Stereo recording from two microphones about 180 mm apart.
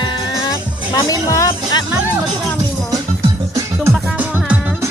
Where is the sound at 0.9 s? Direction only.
20° left (ahead or behind).